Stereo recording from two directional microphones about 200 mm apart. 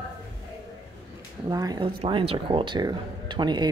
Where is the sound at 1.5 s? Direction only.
20° right (ahead or behind).